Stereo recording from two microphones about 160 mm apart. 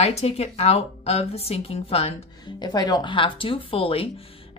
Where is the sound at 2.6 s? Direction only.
25° left (ahead or behind).